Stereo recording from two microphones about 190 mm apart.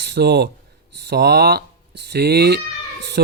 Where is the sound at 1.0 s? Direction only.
60° right (ahead or behind).